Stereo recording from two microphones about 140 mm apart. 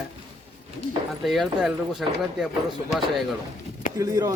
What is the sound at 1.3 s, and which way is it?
Speech, centre (ahead or behind).